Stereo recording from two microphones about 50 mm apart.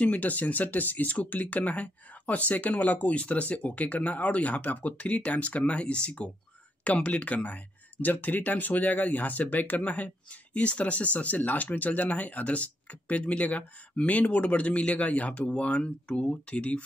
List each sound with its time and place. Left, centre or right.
0.0 s speech: left